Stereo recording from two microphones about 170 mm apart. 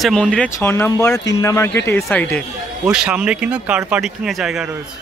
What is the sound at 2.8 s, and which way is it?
Speech, 5° right (ahead or behind).